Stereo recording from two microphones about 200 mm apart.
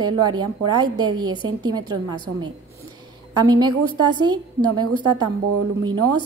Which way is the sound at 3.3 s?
20° right (ahead or behind).